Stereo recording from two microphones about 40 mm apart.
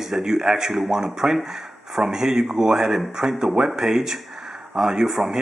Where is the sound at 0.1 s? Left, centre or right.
Centre.